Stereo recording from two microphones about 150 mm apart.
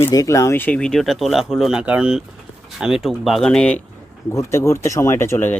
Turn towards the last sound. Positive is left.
turn(degrees=15)  # may be behind; listen again after turning